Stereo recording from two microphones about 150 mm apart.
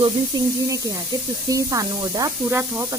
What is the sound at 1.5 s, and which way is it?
Speech, 25° right (ahead or behind).